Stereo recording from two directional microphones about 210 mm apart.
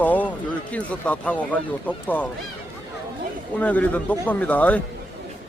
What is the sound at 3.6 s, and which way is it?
Speech, 5° left (ahead or behind).